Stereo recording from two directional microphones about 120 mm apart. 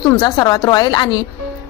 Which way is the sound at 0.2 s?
35° left (ahead or behind).